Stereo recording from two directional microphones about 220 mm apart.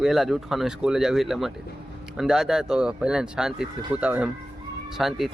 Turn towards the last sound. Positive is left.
turn(degrees=0)  # may be behind; listen again after turning